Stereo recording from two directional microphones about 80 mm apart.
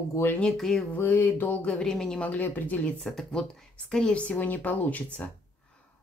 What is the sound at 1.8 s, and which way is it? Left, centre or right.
Speech, centre.